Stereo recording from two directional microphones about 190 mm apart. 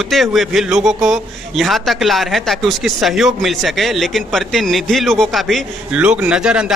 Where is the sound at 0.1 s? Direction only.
Centre (ahead or behind).